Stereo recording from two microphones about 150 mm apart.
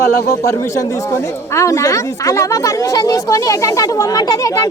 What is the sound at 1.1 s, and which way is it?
Speech, 20° left (ahead or behind).